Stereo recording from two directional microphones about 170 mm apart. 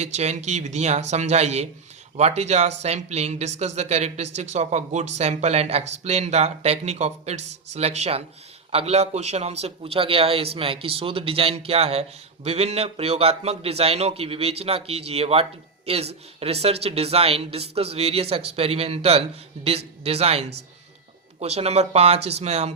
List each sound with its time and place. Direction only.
0.0 s a man's voice: 40° right (ahead or behind)